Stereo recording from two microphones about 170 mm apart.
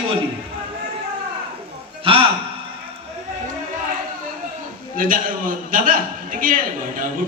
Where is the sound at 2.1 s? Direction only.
30° right (ahead or behind).